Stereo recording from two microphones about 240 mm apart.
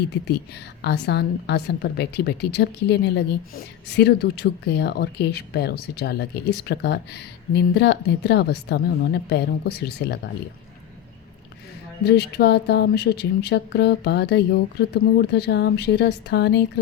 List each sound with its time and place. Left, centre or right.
0.8 s a woman's voice: left
12.0 s a woman's voice: left